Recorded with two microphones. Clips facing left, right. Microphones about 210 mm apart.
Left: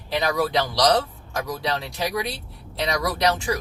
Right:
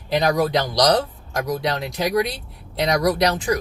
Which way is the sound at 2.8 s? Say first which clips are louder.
Right 6 dB; 40° right (ahead or behind).